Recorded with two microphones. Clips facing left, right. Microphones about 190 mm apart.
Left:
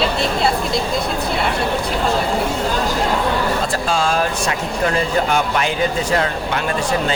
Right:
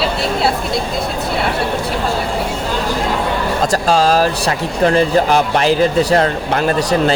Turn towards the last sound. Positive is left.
turn(degrees=-40)  # may be behind; listen again after turning